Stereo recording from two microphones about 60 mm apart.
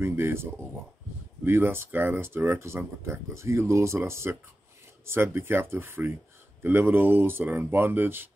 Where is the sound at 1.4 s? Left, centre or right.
Right.